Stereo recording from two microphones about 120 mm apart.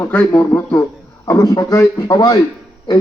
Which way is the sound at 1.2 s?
30° left (ahead or behind).